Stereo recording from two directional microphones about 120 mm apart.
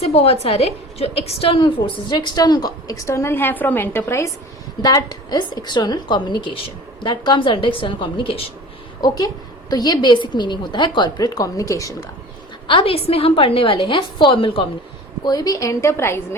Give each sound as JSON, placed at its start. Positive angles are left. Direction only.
{"t": 0.0, "sound": "a woman's voice", "side_deg": 60}
{"t": 4.8, "sound": "a woman's voice", "side_deg": 35}
{"t": 9.0, "sound": "a woman's voice", "side_deg": 35}
{"t": 12.6, "sound": "a woman's voice", "side_deg": 45}
{"t": 15.2, "sound": "a woman's voice", "side_deg": 30}